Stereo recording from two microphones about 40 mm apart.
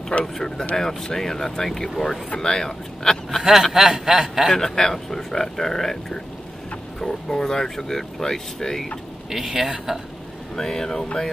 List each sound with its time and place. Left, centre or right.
0.2 s speech: centre
2.0 s speech: centre
3.7 s chuckle: centre
4.5 s speech: centre
9.3 s chuckle: centre
10.5 s speech: centre